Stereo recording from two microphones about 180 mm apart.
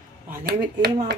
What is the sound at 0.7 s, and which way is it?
Speech, 60° right (ahead or behind).